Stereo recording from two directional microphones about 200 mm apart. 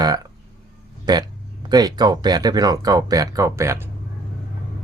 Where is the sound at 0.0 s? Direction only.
20° right (ahead or behind).